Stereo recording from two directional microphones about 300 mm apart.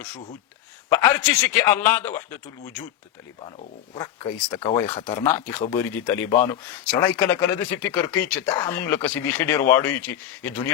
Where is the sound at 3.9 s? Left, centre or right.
Centre.